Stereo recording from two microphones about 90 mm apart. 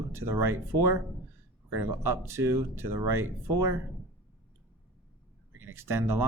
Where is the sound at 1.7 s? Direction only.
30° right (ahead or behind).